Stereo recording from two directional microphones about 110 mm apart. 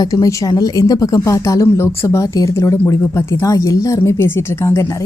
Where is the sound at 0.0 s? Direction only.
35° left (ahead or behind).